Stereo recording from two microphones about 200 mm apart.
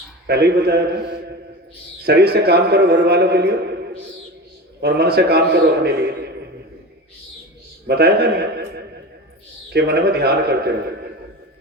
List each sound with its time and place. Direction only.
0.3 s a man's voice: 55° right (ahead or behind)
4.8 s a man's voice: 55° right (ahead or behind)
7.9 s a man's voice: 55° right (ahead or behind)